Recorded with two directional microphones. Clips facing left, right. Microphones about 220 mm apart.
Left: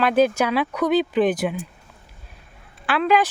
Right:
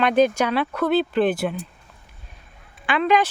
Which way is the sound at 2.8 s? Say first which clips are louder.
Even; 5° left (ahead or behind).